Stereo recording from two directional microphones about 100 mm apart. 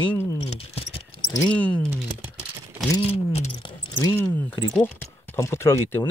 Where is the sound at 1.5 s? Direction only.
15° left (ahead or behind).